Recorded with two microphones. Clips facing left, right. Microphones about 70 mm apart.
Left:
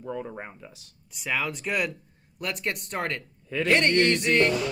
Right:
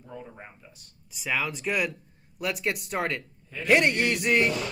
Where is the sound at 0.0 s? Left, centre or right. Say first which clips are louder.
Left 8 dB; left.